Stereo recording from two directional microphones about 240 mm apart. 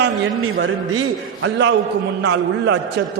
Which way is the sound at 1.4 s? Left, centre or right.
Right.